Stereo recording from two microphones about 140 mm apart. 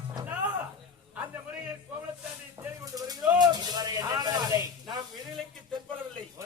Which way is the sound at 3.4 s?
30° right (ahead or behind).